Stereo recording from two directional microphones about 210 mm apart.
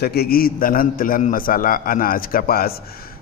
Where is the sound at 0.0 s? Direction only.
50° left (ahead or behind).